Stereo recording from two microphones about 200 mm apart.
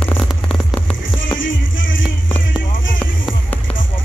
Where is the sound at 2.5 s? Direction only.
5° right (ahead or behind).